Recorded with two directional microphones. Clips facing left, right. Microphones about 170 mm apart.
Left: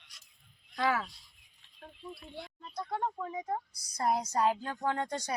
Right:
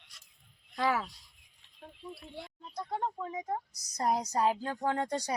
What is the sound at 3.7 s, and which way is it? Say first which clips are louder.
A woman's voice: even; 40° right (ahead or behind).